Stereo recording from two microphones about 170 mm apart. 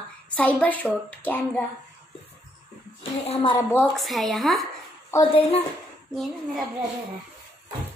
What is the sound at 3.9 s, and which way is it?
Speech, centre (ahead or behind).